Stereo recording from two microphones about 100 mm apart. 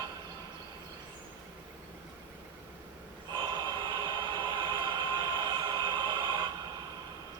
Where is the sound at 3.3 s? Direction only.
55° right (ahead or behind).